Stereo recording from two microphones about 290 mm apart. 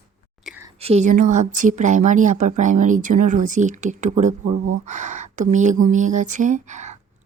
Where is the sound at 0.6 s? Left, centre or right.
Right.